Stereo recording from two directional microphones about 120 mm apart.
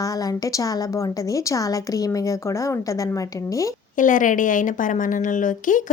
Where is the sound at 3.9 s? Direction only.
90° left.